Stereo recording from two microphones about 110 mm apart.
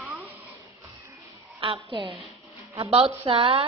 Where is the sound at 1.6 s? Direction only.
50° right (ahead or behind).